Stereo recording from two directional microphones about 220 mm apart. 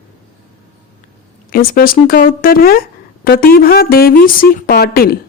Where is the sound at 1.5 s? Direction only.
40° left (ahead or behind).